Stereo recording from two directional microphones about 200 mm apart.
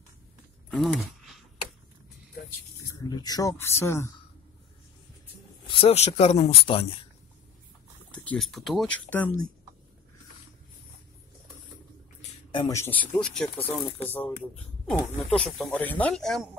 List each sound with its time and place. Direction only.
0.7 s a sound: centre (ahead or behind)
2.8 s speech: 20° left (ahead or behind)
5.7 s speech: 30° left (ahead or behind)
8.4 s speech: centre (ahead or behind)
12.4 s a sound: 25° left (ahead or behind)
12.7 s speech: 10° left (ahead or behind)